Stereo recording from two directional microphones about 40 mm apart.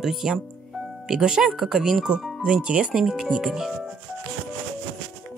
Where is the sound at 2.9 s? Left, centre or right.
Centre.